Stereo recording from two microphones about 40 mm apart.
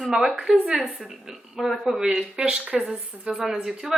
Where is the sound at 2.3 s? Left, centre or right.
Right.